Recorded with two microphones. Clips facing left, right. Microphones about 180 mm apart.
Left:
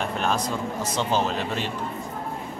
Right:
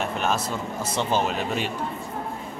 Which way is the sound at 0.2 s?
5° right (ahead or behind).